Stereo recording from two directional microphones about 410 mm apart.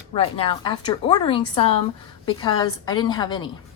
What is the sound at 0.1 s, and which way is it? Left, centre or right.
A woman's voice, centre.